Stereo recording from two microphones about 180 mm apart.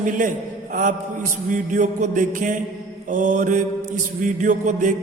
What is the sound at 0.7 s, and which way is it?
Mantra, 50° right (ahead or behind).